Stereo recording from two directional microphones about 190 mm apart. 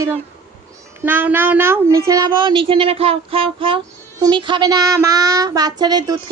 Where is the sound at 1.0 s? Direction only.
10° right (ahead or behind).